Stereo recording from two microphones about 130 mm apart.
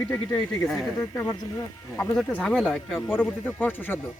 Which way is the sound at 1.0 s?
25° left (ahead or behind).